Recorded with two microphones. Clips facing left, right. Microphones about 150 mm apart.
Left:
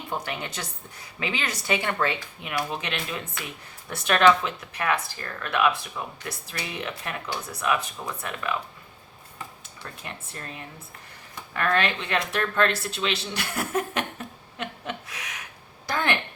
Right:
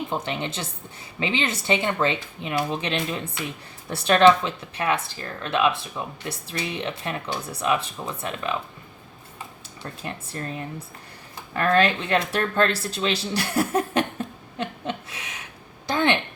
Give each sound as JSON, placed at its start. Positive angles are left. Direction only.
{"t": 0.1, "sound": "speech", "side_deg": -25}
{"t": 9.8, "sound": "speech", "side_deg": -35}
{"t": 11.5, "sound": "speech", "side_deg": -35}
{"t": 14.6, "sound": "a sound", "side_deg": -30}